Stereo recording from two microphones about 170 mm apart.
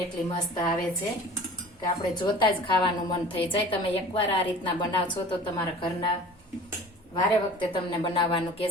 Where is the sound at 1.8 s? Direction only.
25° left (ahead or behind).